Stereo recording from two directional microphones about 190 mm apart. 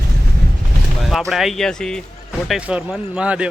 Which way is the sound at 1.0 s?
Centre (ahead or behind).